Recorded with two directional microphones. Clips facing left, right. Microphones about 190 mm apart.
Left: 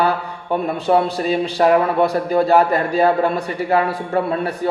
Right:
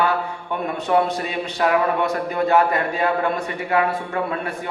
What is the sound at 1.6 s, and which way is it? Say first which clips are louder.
Speech: left 4 dB; 35° left (ahead or behind).